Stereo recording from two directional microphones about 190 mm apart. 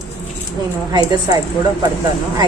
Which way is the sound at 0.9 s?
20° right (ahead or behind).